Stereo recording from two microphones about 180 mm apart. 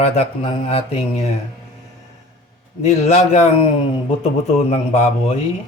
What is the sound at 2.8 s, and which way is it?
Speech, 40° left (ahead or behind).